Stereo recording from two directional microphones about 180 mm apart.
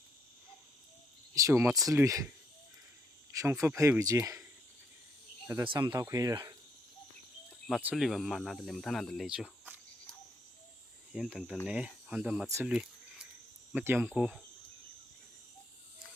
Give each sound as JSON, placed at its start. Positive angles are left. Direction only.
{"t": 1.4, "sound": "speech", "side_deg": -15}
{"t": 3.3, "sound": "speech", "side_deg": -15}
{"t": 5.6, "sound": "speech", "side_deg": -25}
{"t": 7.7, "sound": "speech", "side_deg": -5}
{"t": 12.5, "sound": "speech", "side_deg": -15}
{"t": 13.7, "sound": "speech", "side_deg": -10}